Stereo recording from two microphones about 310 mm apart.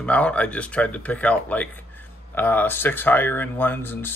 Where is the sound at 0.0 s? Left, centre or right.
Centre.